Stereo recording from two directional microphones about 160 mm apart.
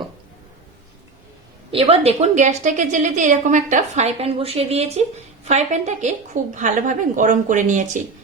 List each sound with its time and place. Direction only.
1.7 s a woman's voice: 40° right (ahead or behind)